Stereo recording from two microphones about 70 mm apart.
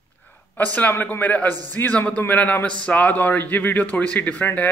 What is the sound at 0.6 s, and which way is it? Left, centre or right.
A man's voice, left.